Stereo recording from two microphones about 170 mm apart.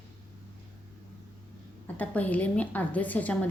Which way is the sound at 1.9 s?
10° left (ahead or behind).